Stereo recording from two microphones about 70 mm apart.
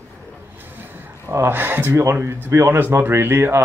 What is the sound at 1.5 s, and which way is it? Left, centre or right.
Speech, right.